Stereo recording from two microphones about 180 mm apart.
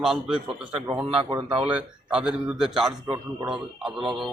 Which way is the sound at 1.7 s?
5° right (ahead or behind).